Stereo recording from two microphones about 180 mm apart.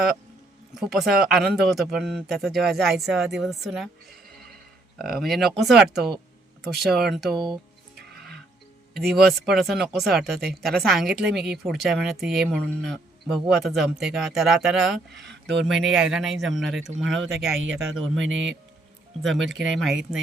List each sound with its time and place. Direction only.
0.7 s speech: centre (ahead or behind)
4.9 s speech: centre (ahead or behind)
7.3 s speech: 25° right (ahead or behind)
9.1 s speech: centre (ahead or behind)
15.2 s speech: 75° right (ahead or behind)
15.6 s speech: centre (ahead or behind)
18.2 s a man's voice: 90° right
19.5 s speech: centre (ahead or behind)